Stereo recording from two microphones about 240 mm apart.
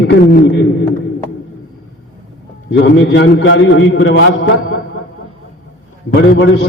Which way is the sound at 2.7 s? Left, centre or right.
Left.